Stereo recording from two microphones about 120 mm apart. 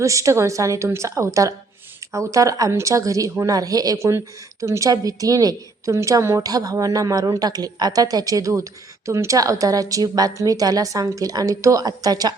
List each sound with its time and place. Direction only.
0.0 s a woman's voice: 25° right (ahead or behind)